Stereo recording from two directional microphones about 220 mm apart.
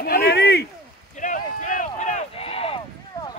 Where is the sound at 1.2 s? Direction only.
35° left (ahead or behind).